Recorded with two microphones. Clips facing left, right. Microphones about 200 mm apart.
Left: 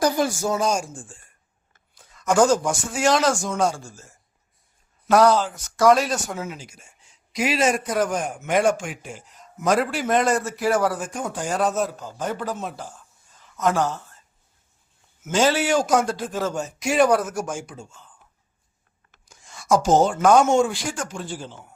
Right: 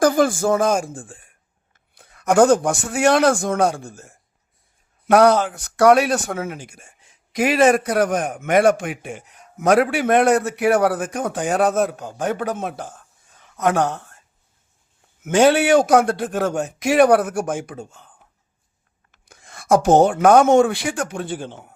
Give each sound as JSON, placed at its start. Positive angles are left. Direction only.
{"t": 0.0, "sound": "speech", "side_deg": -50}
{"t": 15.2, "sound": "speech", "side_deg": -60}
{"t": 19.2, "sound": "a woman's voice", "side_deg": -60}